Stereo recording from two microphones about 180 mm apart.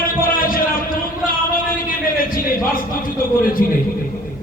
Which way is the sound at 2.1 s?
50° left (ahead or behind).